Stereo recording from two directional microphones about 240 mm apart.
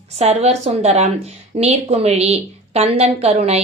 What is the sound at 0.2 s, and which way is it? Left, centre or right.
A woman's voice, right.